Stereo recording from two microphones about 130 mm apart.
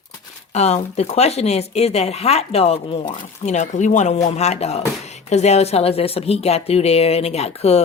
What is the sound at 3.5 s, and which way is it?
Speech, 65° left (ahead or behind).